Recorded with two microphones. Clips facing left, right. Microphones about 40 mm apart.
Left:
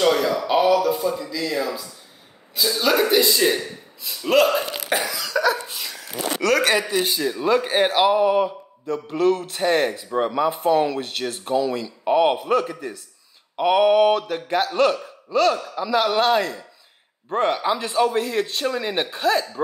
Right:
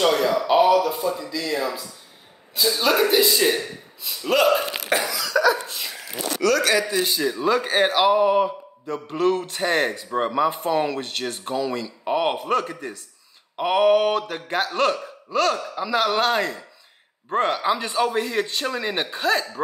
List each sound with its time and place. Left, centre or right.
0.1 s a man's voice: centre
6.4 s speech: left
7.2 s a man's voice: centre